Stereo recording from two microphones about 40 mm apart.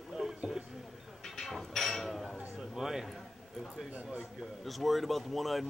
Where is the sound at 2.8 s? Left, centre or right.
Centre.